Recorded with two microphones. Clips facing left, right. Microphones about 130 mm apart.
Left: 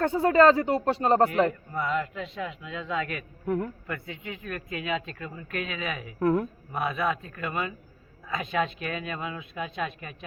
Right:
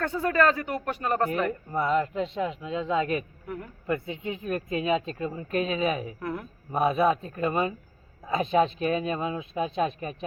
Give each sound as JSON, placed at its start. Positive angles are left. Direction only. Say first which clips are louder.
{"t": 0.0, "sound": "speech", "louder": "left 4 dB", "side_deg": 25}
{"t": 1.7, "sound": "speech", "louder": "right 4 dB", "side_deg": -30}
{"t": 3.4, "sound": "speech", "louder": "left 9 dB", "side_deg": 45}
{"t": 3.8, "sound": "speech", "louder": "right 7 dB", "side_deg": -25}
{"t": 6.1, "sound": "speech", "louder": "left 9 dB", "side_deg": 45}
{"t": 6.7, "sound": "speech", "louder": "right 9 dB", "side_deg": -30}